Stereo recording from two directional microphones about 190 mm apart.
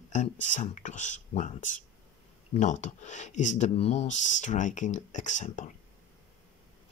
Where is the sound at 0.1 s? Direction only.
40° left (ahead or behind).